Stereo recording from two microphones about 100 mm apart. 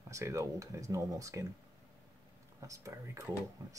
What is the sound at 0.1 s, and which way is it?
Speech, 30° right (ahead or behind).